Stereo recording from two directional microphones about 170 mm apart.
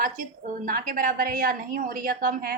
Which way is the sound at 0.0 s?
50° right (ahead or behind).